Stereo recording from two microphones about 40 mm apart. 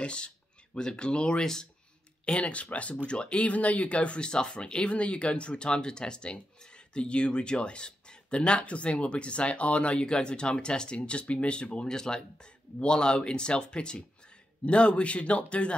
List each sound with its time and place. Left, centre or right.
0.0 s speech: left
1.4 s speech: centre
2.2 s a man's voice: left